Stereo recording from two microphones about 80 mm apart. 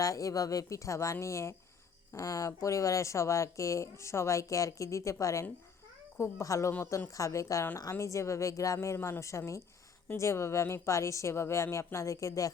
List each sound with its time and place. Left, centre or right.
0.0 s a woman's voice: left